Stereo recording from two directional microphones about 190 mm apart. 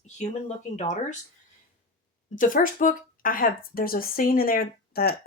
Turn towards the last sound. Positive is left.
turn(degrees=50)  # may be behind; listen again after turning